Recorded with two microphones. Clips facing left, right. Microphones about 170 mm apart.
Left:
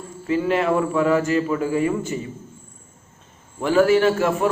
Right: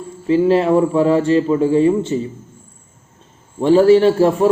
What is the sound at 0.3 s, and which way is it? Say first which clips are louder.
Speech: right 7 dB; 30° right (ahead or behind).